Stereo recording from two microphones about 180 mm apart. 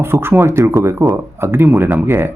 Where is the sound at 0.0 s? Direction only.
15° right (ahead or behind).